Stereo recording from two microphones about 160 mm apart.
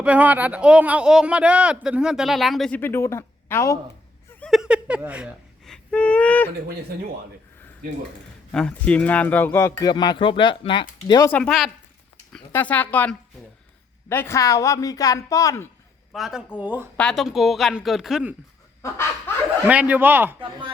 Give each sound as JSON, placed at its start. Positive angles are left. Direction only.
{"t": 0.0, "sound": "a man's voice", "side_deg": -10}
{"t": 4.3, "sound": "a sound", "side_deg": 5}
{"t": 5.6, "sound": "a sound", "side_deg": 5}
{"t": 8.5, "sound": "speech", "side_deg": 5}
{"t": 9.8, "sound": "speech", "side_deg": 25}
{"t": 11.3, "sound": "a man's voice", "side_deg": 5}
{"t": 16.1, "sound": "a man's voice", "side_deg": 0}
{"t": 17.0, "sound": "a man's voice", "side_deg": 5}
{"t": 19.6, "sound": "speech", "side_deg": -10}